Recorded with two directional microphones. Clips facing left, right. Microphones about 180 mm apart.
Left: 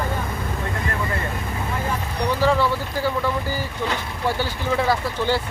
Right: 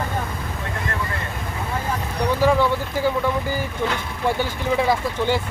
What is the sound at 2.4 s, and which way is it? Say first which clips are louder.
Speech: right 2 dB; 15° right (ahead or behind).